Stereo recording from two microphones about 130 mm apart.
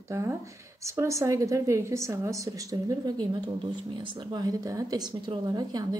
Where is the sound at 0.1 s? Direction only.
20° right (ahead or behind).